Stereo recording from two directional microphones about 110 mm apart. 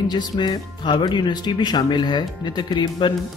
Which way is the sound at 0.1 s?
45° left (ahead or behind).